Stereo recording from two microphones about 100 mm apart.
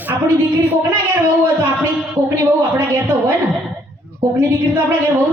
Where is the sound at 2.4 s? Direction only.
25° right (ahead or behind).